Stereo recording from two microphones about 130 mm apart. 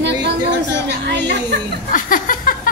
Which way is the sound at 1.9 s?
90° left.